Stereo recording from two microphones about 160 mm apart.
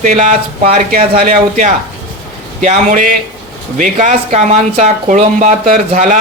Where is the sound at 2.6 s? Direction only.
50° right (ahead or behind).